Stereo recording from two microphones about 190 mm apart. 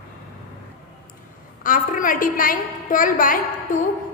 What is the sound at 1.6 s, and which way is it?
A woman's voice, 45° left (ahead or behind).